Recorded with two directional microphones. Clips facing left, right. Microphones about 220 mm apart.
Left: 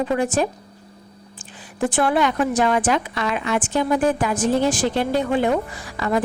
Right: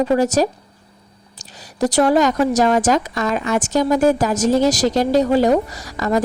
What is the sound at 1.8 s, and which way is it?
A woman's voice, 40° right (ahead or behind).